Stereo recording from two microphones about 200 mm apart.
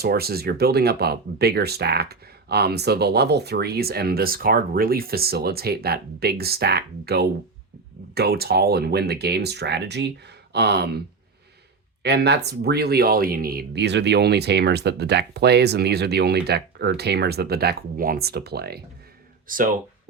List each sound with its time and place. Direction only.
0.0 s speech: 50° right (ahead or behind)
12.0 s speech: 55° right (ahead or behind)
19.5 s speech: 45° right (ahead or behind)